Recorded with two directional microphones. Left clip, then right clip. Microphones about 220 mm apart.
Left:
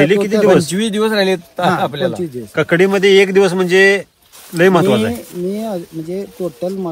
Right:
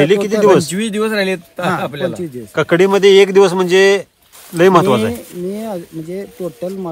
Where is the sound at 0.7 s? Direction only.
5° left (ahead or behind).